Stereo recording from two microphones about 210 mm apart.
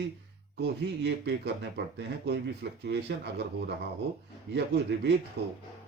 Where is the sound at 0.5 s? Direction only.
55° right (ahead or behind).